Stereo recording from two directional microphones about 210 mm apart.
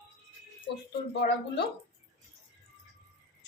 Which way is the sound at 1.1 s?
55° left (ahead or behind).